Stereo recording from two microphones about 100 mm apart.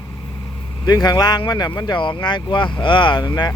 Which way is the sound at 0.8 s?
40° left (ahead or behind).